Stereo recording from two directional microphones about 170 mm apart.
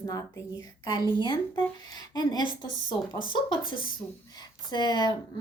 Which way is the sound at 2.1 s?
25° left (ahead or behind).